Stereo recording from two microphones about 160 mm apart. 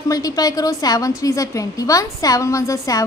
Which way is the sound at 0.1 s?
25° left (ahead or behind).